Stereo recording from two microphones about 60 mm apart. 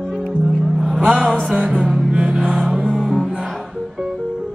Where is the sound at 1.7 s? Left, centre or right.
Centre.